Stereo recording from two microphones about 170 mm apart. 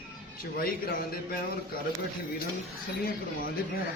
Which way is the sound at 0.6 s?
60° left (ahead or behind).